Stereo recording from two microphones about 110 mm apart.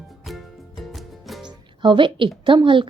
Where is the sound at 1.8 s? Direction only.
45° right (ahead or behind).